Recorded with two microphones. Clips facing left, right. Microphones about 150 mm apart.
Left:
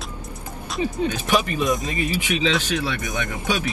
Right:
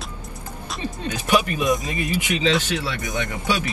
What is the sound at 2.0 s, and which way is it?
Speech, 10° right (ahead or behind).